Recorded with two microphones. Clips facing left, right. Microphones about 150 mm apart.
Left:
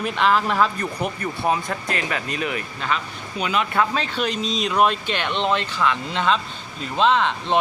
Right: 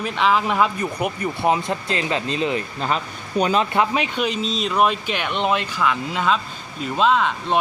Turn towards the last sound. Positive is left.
turn(degrees=-5)  # may be behind; listen again after turning